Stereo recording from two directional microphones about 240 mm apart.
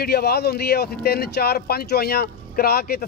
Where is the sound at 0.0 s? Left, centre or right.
Left.